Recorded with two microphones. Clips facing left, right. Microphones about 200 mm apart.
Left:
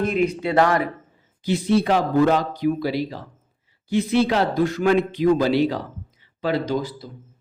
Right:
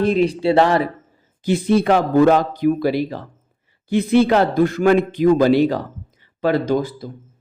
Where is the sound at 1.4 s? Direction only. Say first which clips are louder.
Right 3 dB; 50° right (ahead or behind).